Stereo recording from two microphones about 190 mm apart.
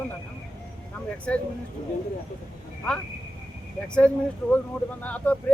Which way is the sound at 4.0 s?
5° left (ahead or behind).